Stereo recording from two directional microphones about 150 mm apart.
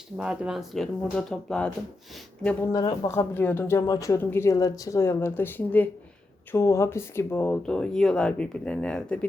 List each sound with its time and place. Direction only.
0.2 s speech: 5° right (ahead or behind)
2.7 s speech: 25° left (ahead or behind)
3.1 s speech: 15° left (ahead or behind)